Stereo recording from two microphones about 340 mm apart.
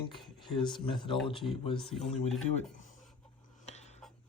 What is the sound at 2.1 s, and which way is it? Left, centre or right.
Speech, centre.